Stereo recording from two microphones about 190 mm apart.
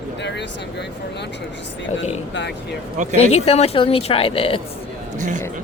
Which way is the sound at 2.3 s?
65° left (ahead or behind).